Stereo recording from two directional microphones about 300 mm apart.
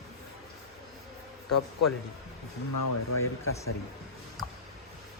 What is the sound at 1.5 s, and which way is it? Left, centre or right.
Speech, left.